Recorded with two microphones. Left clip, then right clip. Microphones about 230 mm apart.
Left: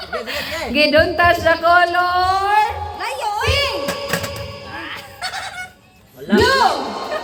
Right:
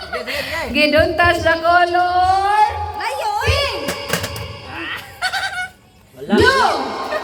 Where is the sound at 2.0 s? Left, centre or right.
Left.